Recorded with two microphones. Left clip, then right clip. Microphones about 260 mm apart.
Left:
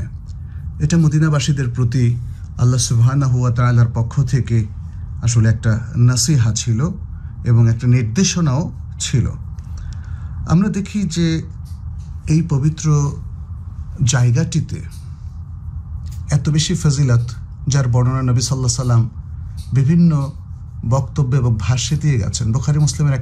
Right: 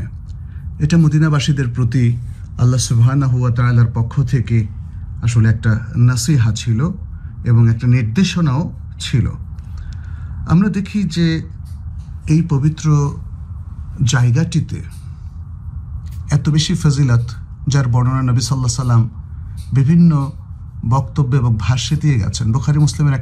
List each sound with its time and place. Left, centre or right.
0.7 s a man's voice: centre
10.4 s a man's voice: centre
16.3 s a man's voice: centre